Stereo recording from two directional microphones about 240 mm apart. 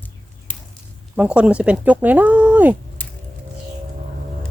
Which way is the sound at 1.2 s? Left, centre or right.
Centre.